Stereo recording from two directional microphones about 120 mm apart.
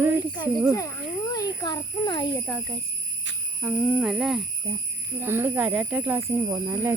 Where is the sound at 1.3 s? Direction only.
30° left (ahead or behind).